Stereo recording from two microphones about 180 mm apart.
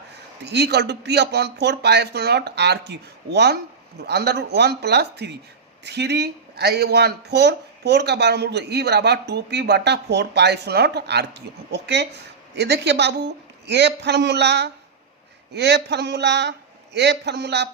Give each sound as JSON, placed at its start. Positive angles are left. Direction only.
{"t": 0.1, "sound": "speech", "side_deg": -70}